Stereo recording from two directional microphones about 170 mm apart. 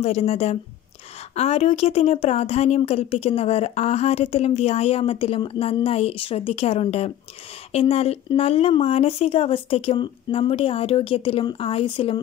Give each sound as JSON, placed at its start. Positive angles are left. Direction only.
{"t": 0.0, "sound": "speech", "side_deg": 40}